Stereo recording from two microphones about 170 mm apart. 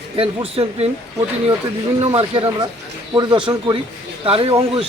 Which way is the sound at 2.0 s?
35° right (ahead or behind).